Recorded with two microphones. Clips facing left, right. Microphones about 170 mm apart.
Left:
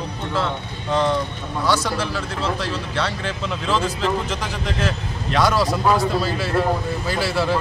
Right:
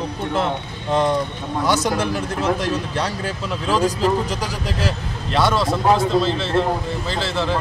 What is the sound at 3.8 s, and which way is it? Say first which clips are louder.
Speech: right 4 dB; 35° right (ahead or behind).